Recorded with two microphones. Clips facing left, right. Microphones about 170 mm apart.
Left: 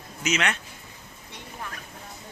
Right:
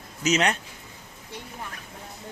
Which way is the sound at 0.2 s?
35° right (ahead or behind).